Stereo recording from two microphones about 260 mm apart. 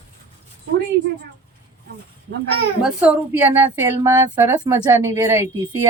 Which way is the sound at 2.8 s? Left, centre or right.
Centre.